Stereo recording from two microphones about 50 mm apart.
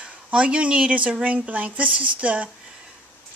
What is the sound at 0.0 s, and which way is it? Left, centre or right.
Speech, right.